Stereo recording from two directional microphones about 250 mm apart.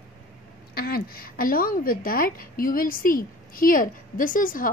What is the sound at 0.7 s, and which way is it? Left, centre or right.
Speech, left.